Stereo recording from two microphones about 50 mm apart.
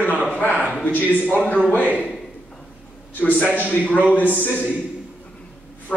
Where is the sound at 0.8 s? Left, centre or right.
Left.